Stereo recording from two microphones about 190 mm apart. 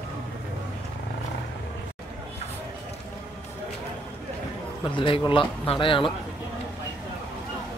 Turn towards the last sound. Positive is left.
turn(degrees=25)  # may be behind; listen again after turning